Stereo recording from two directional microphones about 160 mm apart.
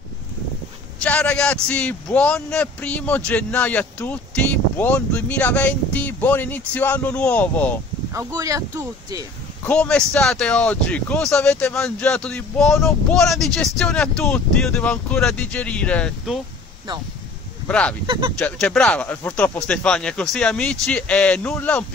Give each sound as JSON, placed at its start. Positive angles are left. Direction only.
{"t": 0.9, "sound": "speech", "side_deg": 10}
{"t": 8.1, "sound": "speech", "side_deg": -20}
{"t": 9.7, "sound": "speech", "side_deg": 5}
{"t": 17.6, "sound": "speech", "side_deg": 5}
{"t": 18.0, "sound": "speech", "side_deg": -30}
{"t": 18.4, "sound": "speech", "side_deg": 5}